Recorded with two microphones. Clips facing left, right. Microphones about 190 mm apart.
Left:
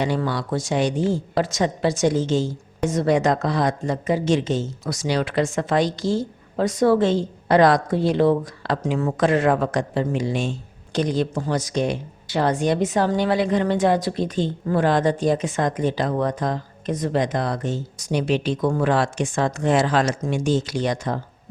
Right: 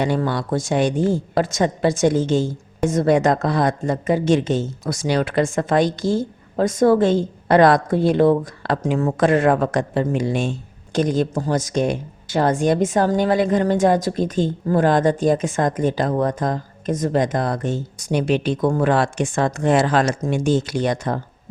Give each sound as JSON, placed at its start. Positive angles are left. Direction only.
{"t": 0.0, "sound": "a woman's voice", "side_deg": -50}